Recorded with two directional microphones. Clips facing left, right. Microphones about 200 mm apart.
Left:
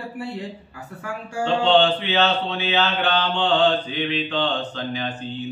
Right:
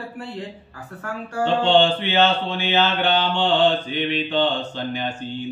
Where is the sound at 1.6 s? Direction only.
10° right (ahead or behind).